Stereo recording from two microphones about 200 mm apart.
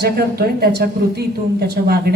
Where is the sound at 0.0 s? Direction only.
50° right (ahead or behind).